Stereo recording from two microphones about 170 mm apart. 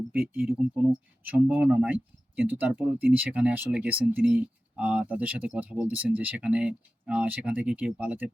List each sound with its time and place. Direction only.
0.1 s speech: 10° right (ahead or behind)